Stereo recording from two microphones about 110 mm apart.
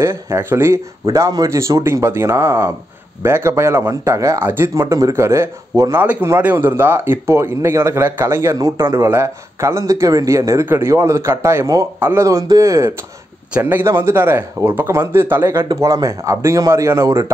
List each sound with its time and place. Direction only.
0.0 s speech: 25° right (ahead or behind)
13.5 s speech: 15° right (ahead or behind)
15.7 s speech: 30° right (ahead or behind)